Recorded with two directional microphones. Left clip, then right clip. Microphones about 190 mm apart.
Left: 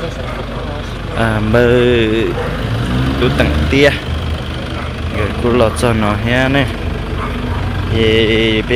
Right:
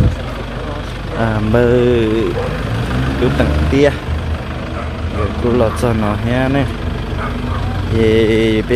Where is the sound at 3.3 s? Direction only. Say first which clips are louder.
Left 2 dB; 5° right (ahead or behind).